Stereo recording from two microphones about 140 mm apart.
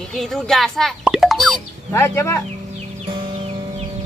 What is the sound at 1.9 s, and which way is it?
Speech, 20° left (ahead or behind).